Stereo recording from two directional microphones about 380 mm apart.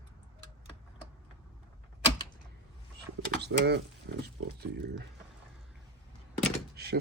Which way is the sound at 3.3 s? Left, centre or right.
Right.